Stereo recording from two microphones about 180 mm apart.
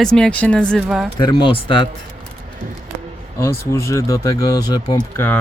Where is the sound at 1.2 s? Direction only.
25° left (ahead or behind).